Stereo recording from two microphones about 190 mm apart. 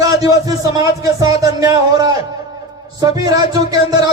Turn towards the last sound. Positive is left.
turn(degrees=-20)  # may be behind; listen again after turning